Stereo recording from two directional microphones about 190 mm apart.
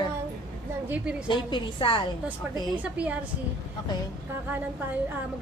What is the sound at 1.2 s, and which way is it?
Speech, 25° left (ahead or behind).